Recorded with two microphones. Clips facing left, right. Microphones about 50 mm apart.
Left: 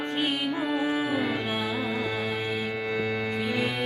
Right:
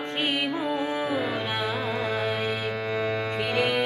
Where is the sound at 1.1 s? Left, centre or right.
Centre.